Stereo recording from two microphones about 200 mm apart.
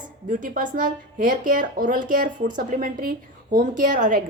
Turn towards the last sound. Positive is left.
turn(degrees=-40)  # may be behind; listen again after turning